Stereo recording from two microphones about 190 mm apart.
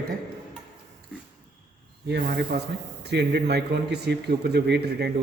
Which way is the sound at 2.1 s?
60° right (ahead or behind).